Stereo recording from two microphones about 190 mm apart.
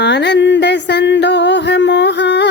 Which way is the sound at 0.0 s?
60° left (ahead or behind).